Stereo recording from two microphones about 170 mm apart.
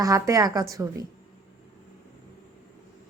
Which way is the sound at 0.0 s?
20° right (ahead or behind).